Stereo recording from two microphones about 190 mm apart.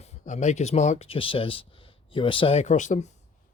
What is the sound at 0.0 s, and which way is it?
Speech, 35° left (ahead or behind).